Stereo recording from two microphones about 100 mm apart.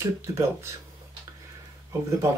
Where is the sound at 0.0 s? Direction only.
30° right (ahead or behind).